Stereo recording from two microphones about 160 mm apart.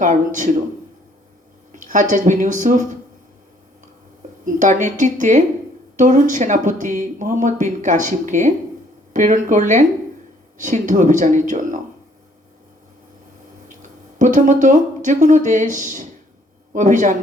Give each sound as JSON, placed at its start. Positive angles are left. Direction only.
{"t": 0.0, "sound": "speech", "side_deg": -50}
{"t": 1.7, "sound": "speech", "side_deg": -55}
{"t": 4.4, "sound": "speech", "side_deg": -50}
{"t": 14.2, "sound": "speech", "side_deg": -50}